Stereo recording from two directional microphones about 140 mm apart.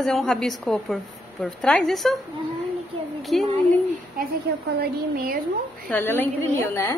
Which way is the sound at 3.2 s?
Centre (ahead or behind).